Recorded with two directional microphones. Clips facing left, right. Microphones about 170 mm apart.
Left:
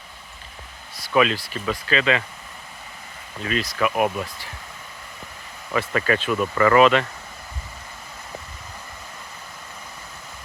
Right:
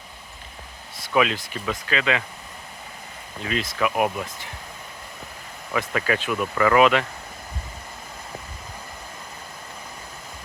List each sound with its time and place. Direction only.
0.9 s speech: 20° right (ahead or behind)
3.4 s speech: 20° right (ahead or behind)
5.7 s speech: 10° right (ahead or behind)